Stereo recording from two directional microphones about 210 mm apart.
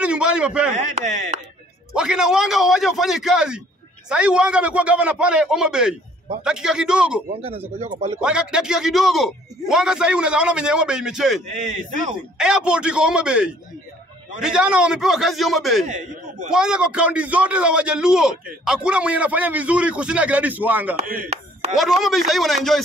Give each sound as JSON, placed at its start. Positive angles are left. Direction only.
{"t": 0.0, "sound": "a sound", "side_deg": -5}
{"t": 0.7, "sound": "speech", "side_deg": -35}
{"t": 2.0, "sound": "a man's voice", "side_deg": -5}
{"t": 7.3, "sound": "speech", "side_deg": -30}
{"t": 8.2, "sound": "a man's voice", "side_deg": -5}
{"t": 11.5, "sound": "speech", "side_deg": -35}
{"t": 12.4, "sound": "a man's voice", "side_deg": -5}
{"t": 15.9, "sound": "speech", "side_deg": -35}
{"t": 16.4, "sound": "a man's voice", "side_deg": -5}
{"t": 21.3, "sound": "speech", "side_deg": -30}
{"t": 21.7, "sound": "a man's voice", "side_deg": 0}